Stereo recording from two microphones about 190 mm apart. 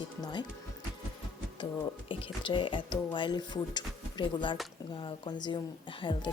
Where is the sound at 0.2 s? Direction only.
25° left (ahead or behind).